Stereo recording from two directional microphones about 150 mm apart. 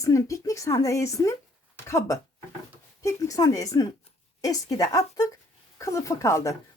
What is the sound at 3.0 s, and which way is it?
A woman's voice, 20° left (ahead or behind).